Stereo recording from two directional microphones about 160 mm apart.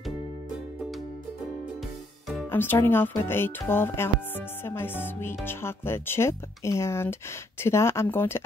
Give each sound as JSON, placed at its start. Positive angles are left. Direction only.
{"t": 2.5, "sound": "music", "side_deg": 15}